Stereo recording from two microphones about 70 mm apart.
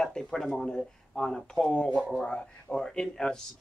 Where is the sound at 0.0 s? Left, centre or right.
Centre.